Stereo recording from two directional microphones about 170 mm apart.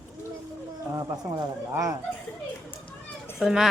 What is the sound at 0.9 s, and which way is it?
Speech, 20° right (ahead or behind).